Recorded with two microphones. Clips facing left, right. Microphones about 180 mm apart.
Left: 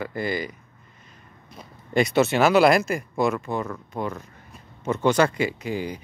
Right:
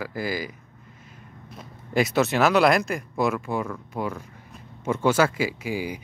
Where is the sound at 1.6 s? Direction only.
Centre (ahead or behind).